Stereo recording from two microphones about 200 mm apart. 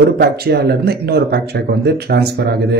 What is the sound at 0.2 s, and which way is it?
Speech, 55° right (ahead or behind).